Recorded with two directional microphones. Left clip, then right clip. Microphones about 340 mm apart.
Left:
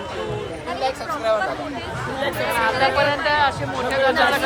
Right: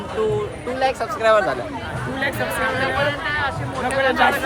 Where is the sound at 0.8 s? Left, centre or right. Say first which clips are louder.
Right 4 dB; right.